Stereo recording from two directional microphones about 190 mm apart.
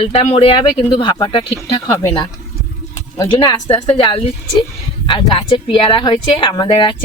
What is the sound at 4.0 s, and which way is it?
Speech, 25° left (ahead or behind).